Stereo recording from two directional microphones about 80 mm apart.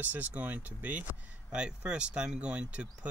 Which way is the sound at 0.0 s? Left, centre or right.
Centre.